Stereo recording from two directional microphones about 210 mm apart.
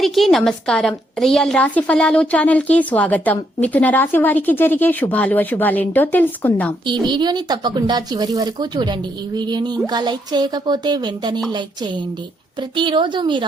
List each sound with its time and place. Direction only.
0.0 s a woman's voice: centre (ahead or behind)
6.8 s speech: 20° right (ahead or behind)